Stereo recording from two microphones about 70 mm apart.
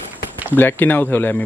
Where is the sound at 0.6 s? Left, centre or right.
Left.